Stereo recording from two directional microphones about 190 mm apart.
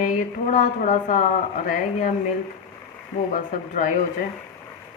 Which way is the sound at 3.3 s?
40° left (ahead or behind).